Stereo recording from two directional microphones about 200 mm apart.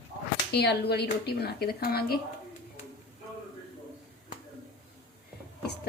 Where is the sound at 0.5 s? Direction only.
55° left (ahead or behind).